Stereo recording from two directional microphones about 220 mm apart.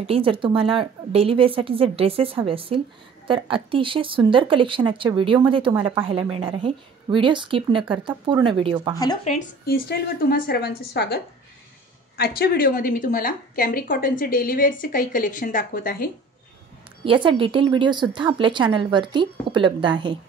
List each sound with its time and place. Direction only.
0.0 s speech: 25° right (ahead or behind)
8.9 s speech: 15° left (ahead or behind)
9.2 s a woman's voice: 35° left (ahead or behind)
12.2 s speech: 45° left (ahead or behind)
17.0 s speech: 25° right (ahead or behind)